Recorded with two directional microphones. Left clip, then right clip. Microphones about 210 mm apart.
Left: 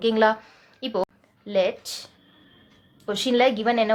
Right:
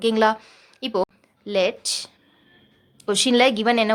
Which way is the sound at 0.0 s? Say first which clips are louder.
Right 1 dB; 30° right (ahead or behind).